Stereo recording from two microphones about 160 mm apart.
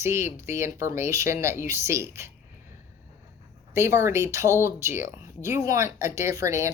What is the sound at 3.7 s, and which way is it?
Speech, 15° right (ahead or behind).